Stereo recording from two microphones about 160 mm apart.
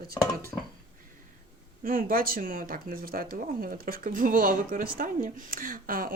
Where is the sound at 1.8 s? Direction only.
60° right (ahead or behind).